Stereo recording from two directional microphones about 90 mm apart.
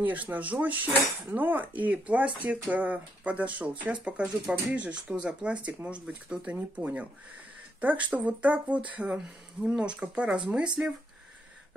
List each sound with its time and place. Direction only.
0.0 s speech: 20° right (ahead or behind)